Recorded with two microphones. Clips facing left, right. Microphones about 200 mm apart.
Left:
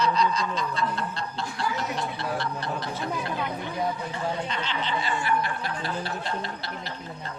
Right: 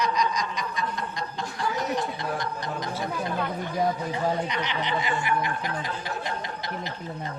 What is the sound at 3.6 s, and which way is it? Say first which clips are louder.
Speech: right 3 dB; 40° right (ahead or behind).